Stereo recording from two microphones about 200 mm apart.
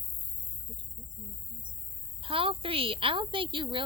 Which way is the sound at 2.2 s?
25° right (ahead or behind).